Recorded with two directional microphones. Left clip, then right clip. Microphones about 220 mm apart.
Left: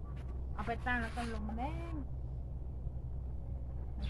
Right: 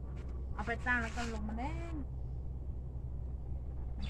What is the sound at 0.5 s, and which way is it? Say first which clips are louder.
Speech: right 2 dB; 20° right (ahead or behind).